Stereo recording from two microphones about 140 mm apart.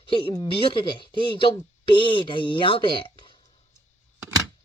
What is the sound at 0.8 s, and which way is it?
Speech, 35° left (ahead or behind).